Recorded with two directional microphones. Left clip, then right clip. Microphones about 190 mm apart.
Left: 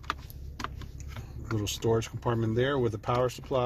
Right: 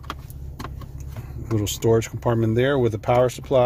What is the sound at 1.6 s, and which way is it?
Speech, 20° right (ahead or behind).